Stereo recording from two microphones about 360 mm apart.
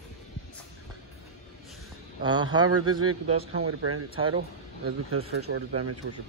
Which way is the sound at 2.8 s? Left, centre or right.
Right.